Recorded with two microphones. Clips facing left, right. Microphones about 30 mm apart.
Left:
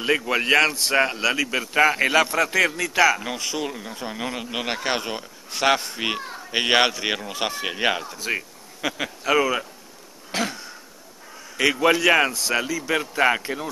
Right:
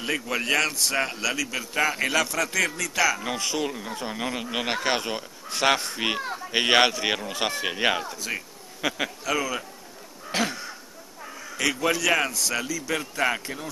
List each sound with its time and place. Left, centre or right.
0.0 s a man's voice: left
3.3 s speech: centre
8.2 s a man's voice: left
8.8 s speech: centre
9.2 s a man's voice: left
10.3 s throat clearing: centre
11.5 s a man's voice: left